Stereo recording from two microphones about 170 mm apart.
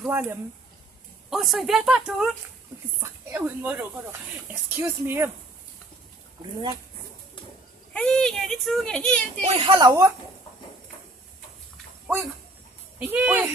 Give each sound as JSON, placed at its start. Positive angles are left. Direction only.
{"t": 0.0, "sound": "speech", "side_deg": -10}
{"t": 3.0, "sound": "speech", "side_deg": -15}
{"t": 7.9, "sound": "speech", "side_deg": 5}
{"t": 9.5, "sound": "a woman's voice", "side_deg": -30}
{"t": 13.0, "sound": "speech", "side_deg": -10}